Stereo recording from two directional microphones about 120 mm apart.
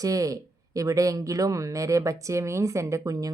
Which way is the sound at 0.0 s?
30° right (ahead or behind).